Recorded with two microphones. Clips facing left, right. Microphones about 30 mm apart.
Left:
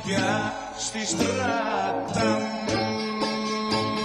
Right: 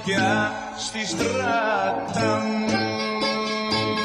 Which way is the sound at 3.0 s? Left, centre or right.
Right.